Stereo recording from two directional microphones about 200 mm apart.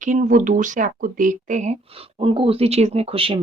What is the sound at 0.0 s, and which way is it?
A woman's voice, 40° right (ahead or behind).